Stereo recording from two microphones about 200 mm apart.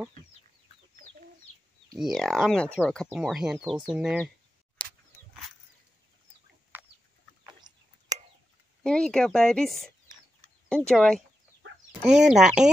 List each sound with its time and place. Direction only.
2.0 s speech: centre (ahead or behind)
7.7 s tick-tock: 20° right (ahead or behind)
8.8 s speech: 5° left (ahead or behind)
10.9 s speech: 5° left (ahead or behind)